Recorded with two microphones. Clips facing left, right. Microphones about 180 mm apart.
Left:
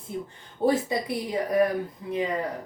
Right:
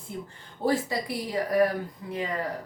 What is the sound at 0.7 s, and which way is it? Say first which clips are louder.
Speech: left 2 dB; 20° left (ahead or behind).